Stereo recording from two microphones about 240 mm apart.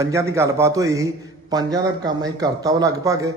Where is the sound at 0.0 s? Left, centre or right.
Centre.